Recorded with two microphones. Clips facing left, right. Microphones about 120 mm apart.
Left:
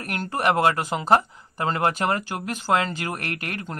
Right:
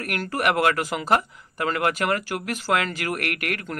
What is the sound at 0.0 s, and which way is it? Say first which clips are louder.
Speech: even; 25° left (ahead or behind).